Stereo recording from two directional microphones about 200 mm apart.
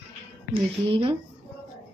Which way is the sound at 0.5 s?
25° right (ahead or behind).